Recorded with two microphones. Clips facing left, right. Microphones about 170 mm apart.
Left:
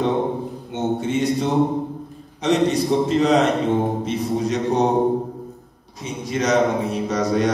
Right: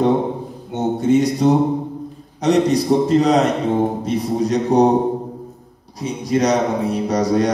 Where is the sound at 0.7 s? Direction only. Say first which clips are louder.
Right 6 dB; 40° right (ahead or behind).